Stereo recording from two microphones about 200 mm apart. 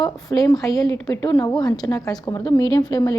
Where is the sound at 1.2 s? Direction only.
20° left (ahead or behind).